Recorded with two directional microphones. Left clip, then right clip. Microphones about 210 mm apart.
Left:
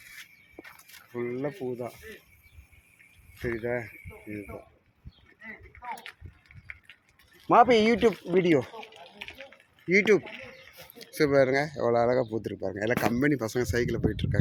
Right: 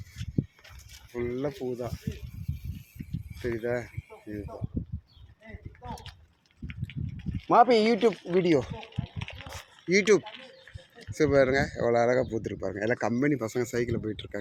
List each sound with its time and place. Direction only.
1.1 s speech: 5° right (ahead or behind)
3.4 s speech: 5° right (ahead or behind)
7.5 s speech: centre (ahead or behind)
8.7 s a sound: 55° left (ahead or behind)
9.9 s speech: 5° right (ahead or behind)